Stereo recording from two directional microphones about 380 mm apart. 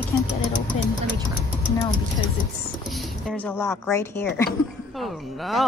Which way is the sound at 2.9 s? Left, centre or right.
Centre.